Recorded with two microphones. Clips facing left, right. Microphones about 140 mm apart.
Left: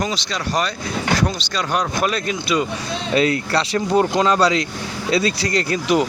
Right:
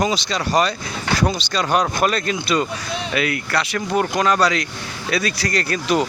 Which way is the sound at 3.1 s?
35° left (ahead or behind).